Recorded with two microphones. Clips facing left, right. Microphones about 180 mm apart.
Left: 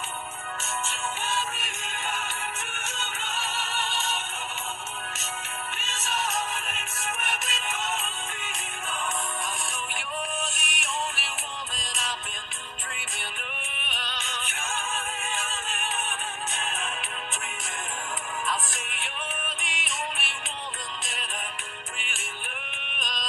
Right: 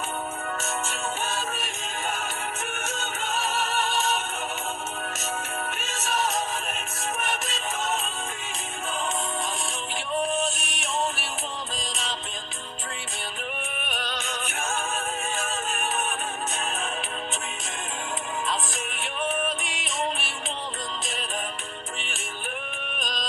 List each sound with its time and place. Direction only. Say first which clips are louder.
0.6 s music: right 3 dB; 40° right (ahead or behind)
5.8 s music: right 4 dB; 45° right (ahead or behind)
10.4 s music: right 5 dB; 35° right (ahead or behind)
13.8 s music: right 4 dB; 45° right (ahead or behind)
19.4 s music: right 8 dB; 35° right (ahead or behind)
23.0 s music: right 2 dB; 35° right (ahead or behind)